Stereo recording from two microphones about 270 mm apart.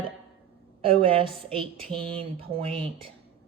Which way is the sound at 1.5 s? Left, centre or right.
Centre.